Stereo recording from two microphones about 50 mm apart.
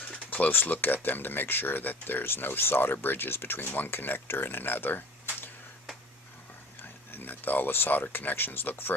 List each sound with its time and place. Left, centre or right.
0.3 s speech: left
6.7 s speech: left